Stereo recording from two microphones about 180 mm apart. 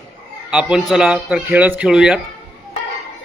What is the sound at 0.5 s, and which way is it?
A man's voice, 5° right (ahead or behind).